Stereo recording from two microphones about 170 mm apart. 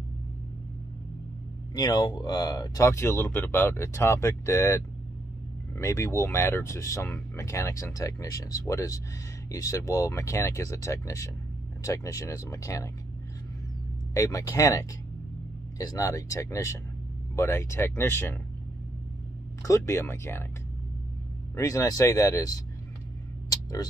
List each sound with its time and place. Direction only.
1.8 s speech: 25° left (ahead or behind)
14.1 s speech: 20° left (ahead or behind)
19.6 s speech: 20° left (ahead or behind)
21.5 s speech: 20° left (ahead or behind)
23.5 s a sound: 20° left (ahead or behind)